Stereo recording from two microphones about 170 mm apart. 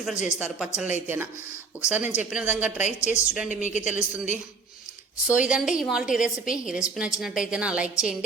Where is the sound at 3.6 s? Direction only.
45° left (ahead or behind).